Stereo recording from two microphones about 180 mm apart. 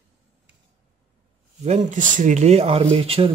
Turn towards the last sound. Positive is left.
turn(degrees=-30)  # may be behind; listen again after turning